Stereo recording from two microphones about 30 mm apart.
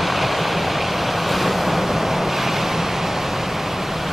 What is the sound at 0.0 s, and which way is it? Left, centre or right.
Waves, centre.